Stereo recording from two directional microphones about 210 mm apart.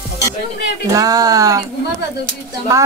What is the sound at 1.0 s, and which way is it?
Speech, 15° right (ahead or behind).